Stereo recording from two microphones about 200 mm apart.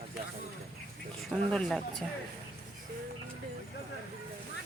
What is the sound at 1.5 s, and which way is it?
Speech, 5° left (ahead or behind).